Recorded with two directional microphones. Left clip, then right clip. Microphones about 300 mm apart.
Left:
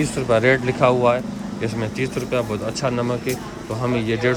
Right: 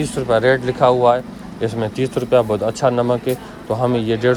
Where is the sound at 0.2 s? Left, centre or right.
Centre.